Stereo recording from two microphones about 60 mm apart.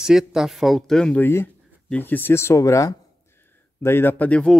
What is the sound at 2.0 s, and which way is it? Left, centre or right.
Speech, left.